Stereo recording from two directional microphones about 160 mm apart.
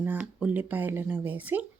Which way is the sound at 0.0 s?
10° right (ahead or behind).